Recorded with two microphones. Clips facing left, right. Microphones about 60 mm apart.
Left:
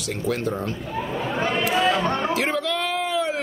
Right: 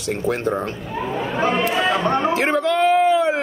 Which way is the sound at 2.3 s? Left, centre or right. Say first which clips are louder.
Right 5 dB; right.